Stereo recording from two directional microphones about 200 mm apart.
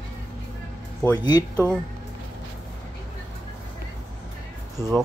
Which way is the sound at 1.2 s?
20° left (ahead or behind).